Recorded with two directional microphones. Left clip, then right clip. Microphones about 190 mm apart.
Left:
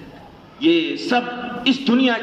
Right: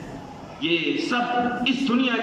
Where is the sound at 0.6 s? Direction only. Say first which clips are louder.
Left 5 dB; 40° left (ahead or behind).